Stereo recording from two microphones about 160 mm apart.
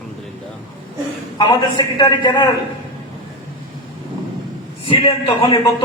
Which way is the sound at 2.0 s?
25° left (ahead or behind).